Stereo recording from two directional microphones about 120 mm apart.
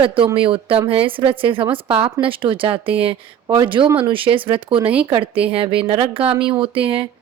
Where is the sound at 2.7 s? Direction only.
15° right (ahead or behind).